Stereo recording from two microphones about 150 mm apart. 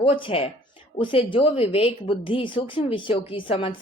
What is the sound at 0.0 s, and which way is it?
A woman's voice, 35° left (ahead or behind).